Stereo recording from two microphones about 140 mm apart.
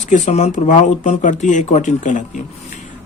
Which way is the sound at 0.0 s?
55° left (ahead or behind).